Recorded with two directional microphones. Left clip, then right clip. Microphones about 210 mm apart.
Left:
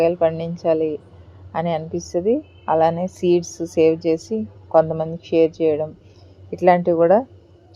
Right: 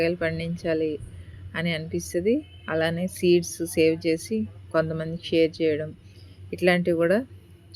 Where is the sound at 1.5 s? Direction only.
5° right (ahead or behind).